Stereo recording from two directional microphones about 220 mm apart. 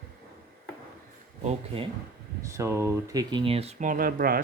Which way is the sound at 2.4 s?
15° right (ahead or behind).